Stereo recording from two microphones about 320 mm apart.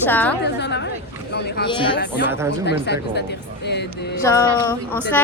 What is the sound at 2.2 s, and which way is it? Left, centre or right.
Speech, centre.